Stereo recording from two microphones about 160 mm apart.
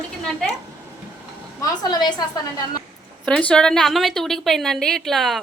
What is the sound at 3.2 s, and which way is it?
Speech, 5° left (ahead or behind).